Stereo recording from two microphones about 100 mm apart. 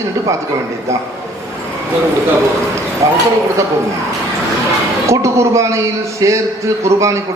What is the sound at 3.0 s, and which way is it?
Speech, 35° right (ahead or behind).